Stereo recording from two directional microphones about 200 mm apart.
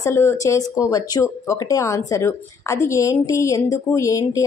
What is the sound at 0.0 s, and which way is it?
A woman's voice, 10° left (ahead or behind).